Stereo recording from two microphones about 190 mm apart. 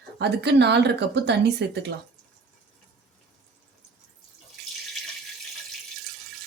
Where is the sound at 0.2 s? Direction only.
60° right (ahead or behind).